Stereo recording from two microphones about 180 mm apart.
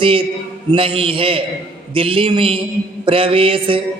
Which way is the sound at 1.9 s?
30° right (ahead or behind).